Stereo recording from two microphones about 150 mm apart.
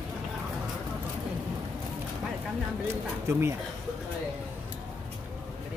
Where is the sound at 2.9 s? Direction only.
15° right (ahead or behind).